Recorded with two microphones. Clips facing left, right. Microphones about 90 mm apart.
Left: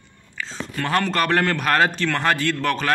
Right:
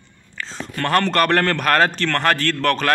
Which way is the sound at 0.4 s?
5° left (ahead or behind).